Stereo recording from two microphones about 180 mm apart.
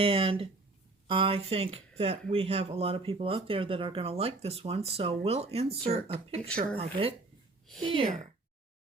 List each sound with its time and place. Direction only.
0.0 s speech: 30° right (ahead or behind)